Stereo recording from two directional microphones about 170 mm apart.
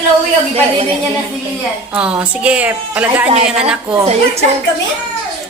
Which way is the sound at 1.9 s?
5° right (ahead or behind).